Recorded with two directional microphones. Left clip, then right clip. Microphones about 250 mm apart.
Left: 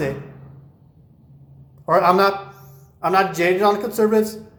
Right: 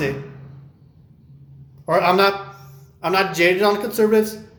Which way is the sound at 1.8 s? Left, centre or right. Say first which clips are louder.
Left 1 dB; centre.